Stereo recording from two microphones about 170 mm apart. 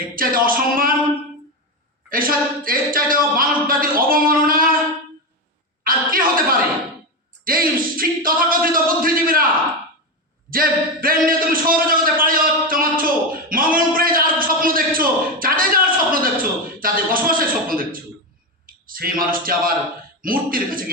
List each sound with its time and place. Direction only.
0.2 s speech: 55° right (ahead or behind)
2.0 s speech: 55° right (ahead or behind)
5.8 s a woman's voice: 55° right (ahead or behind)
10.5 s speech: 55° right (ahead or behind)
12.2 s a sound: 55° right (ahead or behind)
18.6 s a man's voice: 55° right (ahead or behind)